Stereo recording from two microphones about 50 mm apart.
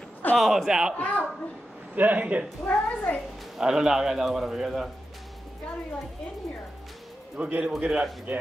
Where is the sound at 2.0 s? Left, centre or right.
Right.